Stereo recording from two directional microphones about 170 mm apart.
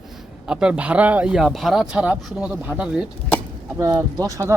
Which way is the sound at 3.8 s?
20° right (ahead or behind).